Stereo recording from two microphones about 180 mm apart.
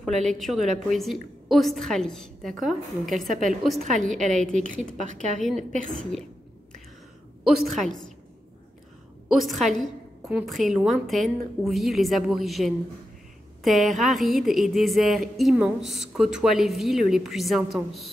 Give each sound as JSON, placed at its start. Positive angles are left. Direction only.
{"t": 0.1, "sound": "a woman's voice", "side_deg": -40}
{"t": 0.4, "sound": "speech", "side_deg": 0}
{"t": 3.8, "sound": "a woman's voice", "side_deg": -45}
{"t": 5.4, "sound": "speech", "side_deg": 0}
{"t": 7.4, "sound": "speech", "side_deg": 0}
{"t": 9.3, "sound": "speech", "side_deg": 0}